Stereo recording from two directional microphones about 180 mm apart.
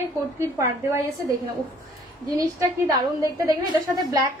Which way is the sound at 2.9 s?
20° right (ahead or behind).